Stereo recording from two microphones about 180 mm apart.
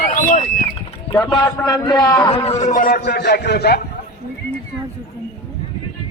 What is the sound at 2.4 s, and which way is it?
A man's voice, 40° left (ahead or behind).